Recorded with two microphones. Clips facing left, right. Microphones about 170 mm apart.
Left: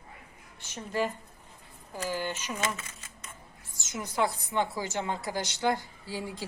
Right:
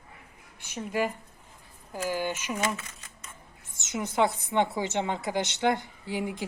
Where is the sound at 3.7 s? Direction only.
25° right (ahead or behind).